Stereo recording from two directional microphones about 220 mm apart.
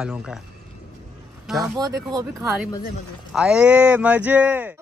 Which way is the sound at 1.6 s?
15° right (ahead or behind).